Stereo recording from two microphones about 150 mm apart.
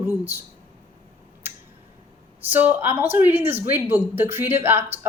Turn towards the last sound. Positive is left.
turn(degrees=-15)  # may be behind; listen again after turning